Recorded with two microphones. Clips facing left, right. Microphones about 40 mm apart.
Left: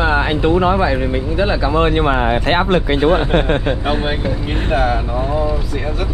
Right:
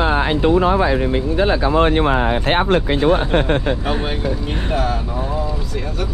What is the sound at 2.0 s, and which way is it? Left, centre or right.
Speech, left.